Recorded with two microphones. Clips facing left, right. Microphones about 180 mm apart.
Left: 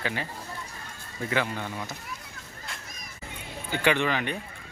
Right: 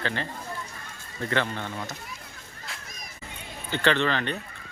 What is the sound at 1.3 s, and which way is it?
Speech, 10° left (ahead or behind).